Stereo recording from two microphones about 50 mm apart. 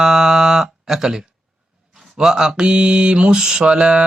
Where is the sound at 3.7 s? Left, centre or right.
Right.